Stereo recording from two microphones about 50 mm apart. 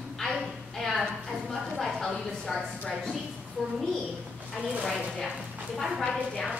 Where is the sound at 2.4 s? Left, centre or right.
Centre.